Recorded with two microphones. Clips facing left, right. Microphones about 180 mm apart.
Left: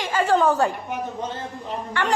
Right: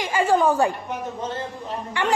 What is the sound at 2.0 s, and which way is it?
Speech, 15° right (ahead or behind).